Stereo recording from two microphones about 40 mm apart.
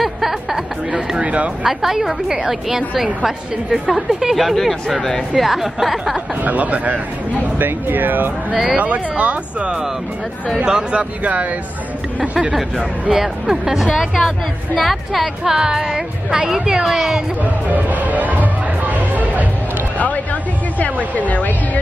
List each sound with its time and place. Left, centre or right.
0.0 s a sound: centre
1.2 s speech: right
1.6 s a woman's voice: centre
4.4 s speech: centre
6.4 s speech: right
7.5 s speech: right
8.7 s speech: right
10.6 s speech: right
13.1 s a woman's voice: centre
15.4 s a woman's voice: centre
17.4 s music: right
21.3 s speech: left